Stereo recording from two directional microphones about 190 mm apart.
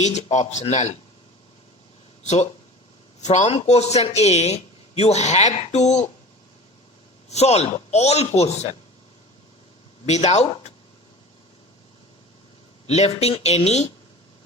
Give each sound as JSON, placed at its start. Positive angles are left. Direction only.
{"t": 0.0, "sound": "speech", "side_deg": 35}
{"t": 2.2, "sound": "speech", "side_deg": 35}
{"t": 7.3, "sound": "speech", "side_deg": 35}
{"t": 10.1, "sound": "speech", "side_deg": 35}
{"t": 12.9, "sound": "speech", "side_deg": 35}